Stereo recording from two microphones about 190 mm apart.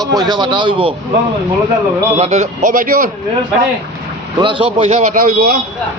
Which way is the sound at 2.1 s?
35° right (ahead or behind).